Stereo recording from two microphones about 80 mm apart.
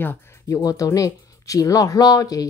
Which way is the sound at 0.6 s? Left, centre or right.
Left.